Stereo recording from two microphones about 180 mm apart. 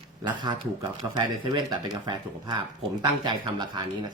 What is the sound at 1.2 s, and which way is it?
Speech, 25° right (ahead or behind).